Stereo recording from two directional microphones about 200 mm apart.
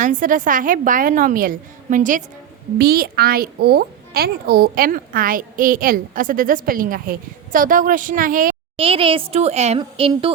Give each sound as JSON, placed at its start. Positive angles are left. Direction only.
{"t": 0.0, "sound": "a woman's voice", "side_deg": -40}
{"t": 2.7, "sound": "a child's voice", "side_deg": -50}
{"t": 8.7, "sound": "a woman's voice", "side_deg": -25}